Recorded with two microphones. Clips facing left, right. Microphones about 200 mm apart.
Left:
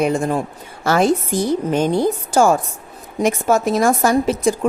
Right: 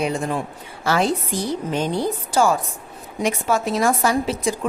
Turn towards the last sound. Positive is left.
turn(degrees=50)  # may be behind; listen again after turning